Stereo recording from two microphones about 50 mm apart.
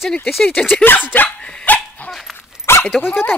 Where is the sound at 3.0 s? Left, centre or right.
Left.